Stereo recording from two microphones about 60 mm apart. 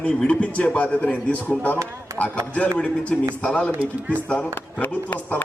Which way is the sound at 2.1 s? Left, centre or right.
Right.